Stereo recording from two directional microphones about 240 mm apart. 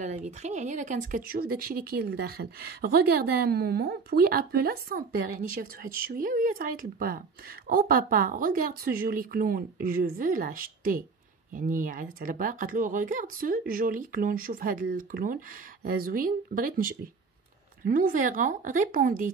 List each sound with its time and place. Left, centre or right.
0.0 s speech: right